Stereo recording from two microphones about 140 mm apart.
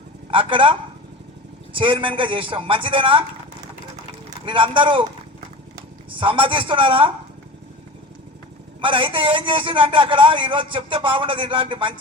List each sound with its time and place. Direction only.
0.3 s a man's voice: 35° right (ahead or behind)
4.4 s a man's voice: 35° right (ahead or behind)
8.8 s a man's voice: 40° right (ahead or behind)